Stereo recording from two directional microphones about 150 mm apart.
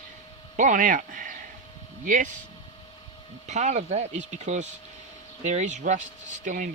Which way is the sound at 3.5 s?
50° right (ahead or behind).